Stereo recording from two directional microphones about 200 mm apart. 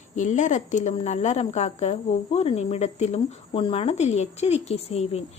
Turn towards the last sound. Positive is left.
turn(degrees=30)  # may be behind; listen again after turning